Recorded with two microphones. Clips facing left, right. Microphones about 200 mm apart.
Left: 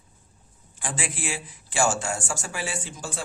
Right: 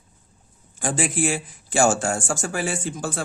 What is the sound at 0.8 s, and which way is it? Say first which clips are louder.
Speech: right 9 dB; 45° right (ahead or behind).